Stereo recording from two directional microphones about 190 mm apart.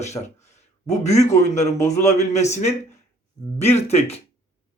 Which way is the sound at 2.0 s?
35° left (ahead or behind).